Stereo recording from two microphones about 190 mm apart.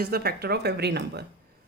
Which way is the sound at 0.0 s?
55° right (ahead or behind).